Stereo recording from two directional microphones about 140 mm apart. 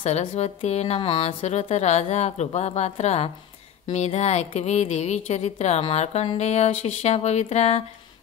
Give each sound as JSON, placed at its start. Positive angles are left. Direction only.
{"t": 0.0, "sound": "speech", "side_deg": 50}